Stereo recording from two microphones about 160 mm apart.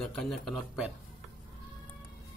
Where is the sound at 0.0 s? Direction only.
5° left (ahead or behind).